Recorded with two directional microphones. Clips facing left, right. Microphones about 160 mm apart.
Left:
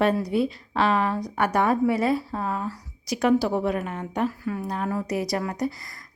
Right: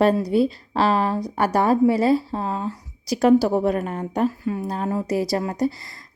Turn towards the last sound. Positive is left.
turn(degrees=-30)  # may be behind; listen again after turning